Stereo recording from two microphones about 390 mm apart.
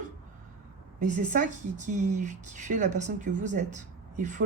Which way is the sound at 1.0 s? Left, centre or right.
Centre.